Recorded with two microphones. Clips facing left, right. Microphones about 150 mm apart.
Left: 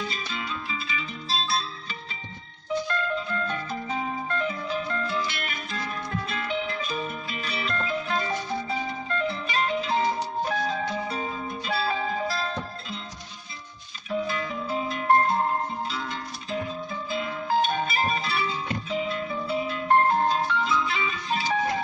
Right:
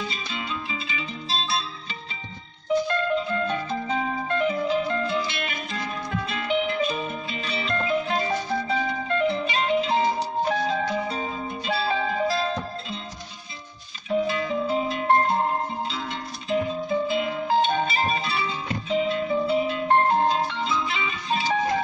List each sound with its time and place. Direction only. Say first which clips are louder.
0.0 s music: right 1 dB; 25° right (ahead or behind)
3.2 s music: right 4 dB; 25° right (ahead or behind)
14.0 s music: right 4 dB; 25° right (ahead or behind)